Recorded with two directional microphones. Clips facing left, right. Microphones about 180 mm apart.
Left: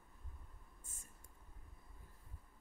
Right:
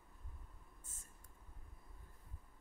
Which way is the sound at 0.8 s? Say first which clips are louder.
Left 1 dB; 15° left (ahead or behind).